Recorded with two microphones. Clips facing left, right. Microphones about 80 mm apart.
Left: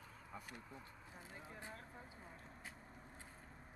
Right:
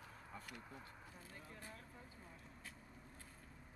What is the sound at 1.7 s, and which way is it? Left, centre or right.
Vehicle, left.